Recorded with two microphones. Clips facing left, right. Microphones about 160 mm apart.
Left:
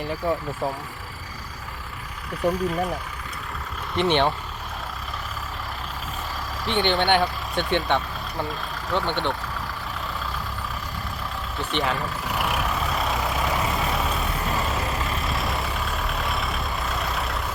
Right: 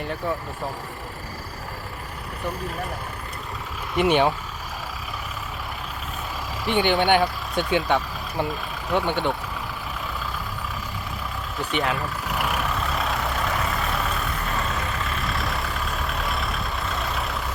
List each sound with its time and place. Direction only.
0.2 s speech: 15° left (ahead or behind)
2.4 s speech: 35° left (ahead or behind)
3.9 s speech: 5° right (ahead or behind)
6.7 s speech: 10° right (ahead or behind)
11.6 s vehicle: centre (ahead or behind)
14.8 s vehicle: 35° left (ahead or behind)
15.0 s vehicle: centre (ahead or behind)